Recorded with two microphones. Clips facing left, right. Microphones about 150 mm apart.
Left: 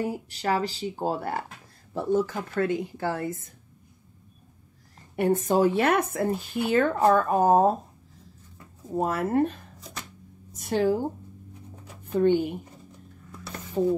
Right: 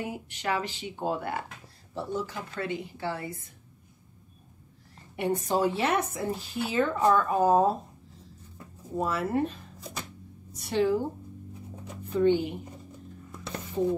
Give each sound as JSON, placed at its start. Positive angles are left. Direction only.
{"t": 0.0, "sound": "speech", "side_deg": 35}
{"t": 2.0, "sound": "speech", "side_deg": 50}
{"t": 5.1, "sound": "speech", "side_deg": 50}
{"t": 9.0, "sound": "speech", "side_deg": 50}
{"t": 12.2, "sound": "speech", "side_deg": 50}
{"t": 13.8, "sound": "speech", "side_deg": 40}